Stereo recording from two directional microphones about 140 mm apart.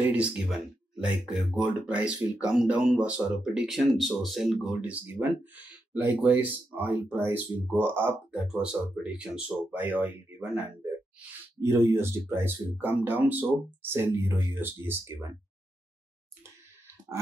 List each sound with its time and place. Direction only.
0.0 s speech: 10° right (ahead or behind)